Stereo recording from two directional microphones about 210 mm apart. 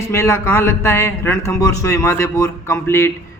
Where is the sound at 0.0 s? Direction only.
15° left (ahead or behind).